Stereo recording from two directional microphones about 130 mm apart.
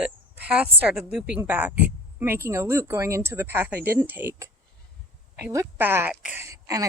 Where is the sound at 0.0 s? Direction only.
10° right (ahead or behind).